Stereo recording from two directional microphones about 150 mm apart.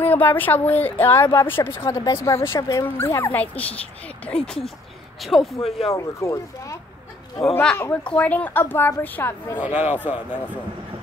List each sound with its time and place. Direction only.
0.0 s speech: 10° left (ahead or behind)
5.2 s speech: centre (ahead or behind)
5.9 s speech: 20° left (ahead or behind)
9.7 s a man's voice: 10° right (ahead or behind)